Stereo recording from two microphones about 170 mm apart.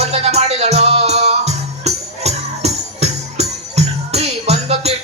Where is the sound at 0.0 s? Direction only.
40° right (ahead or behind).